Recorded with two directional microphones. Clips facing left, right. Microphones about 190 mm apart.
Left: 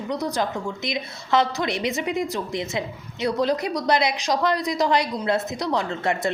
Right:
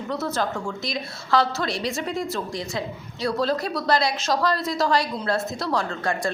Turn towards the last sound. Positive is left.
turn(degrees=20)  # may be behind; listen again after turning